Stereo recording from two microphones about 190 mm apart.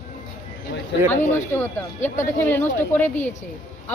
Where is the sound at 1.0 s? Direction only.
10° left (ahead or behind).